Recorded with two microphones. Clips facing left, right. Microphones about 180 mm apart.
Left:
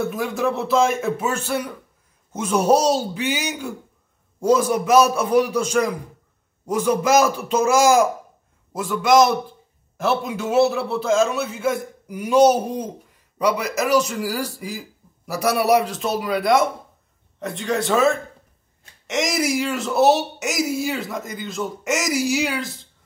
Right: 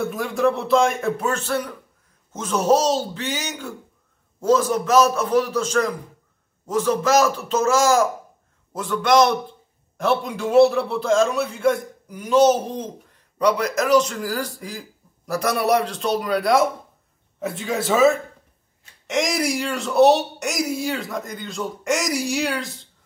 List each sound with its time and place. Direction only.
0.0 s a man's voice: centre (ahead or behind)